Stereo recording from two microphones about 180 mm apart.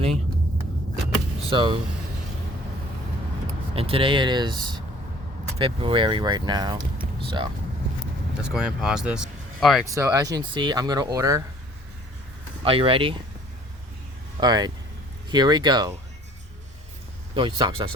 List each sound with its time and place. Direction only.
1.5 s speech: 30° right (ahead or behind)
3.8 s speech: 30° right (ahead or behind)
7.0 s vehicle: 25° right (ahead or behind)
8.4 s speech: 5° right (ahead or behind)
9.8 s speech: 15° right (ahead or behind)
12.6 s speech: 30° right (ahead or behind)
14.3 s speech: 25° right (ahead or behind)
17.3 s speech: 25° right (ahead or behind)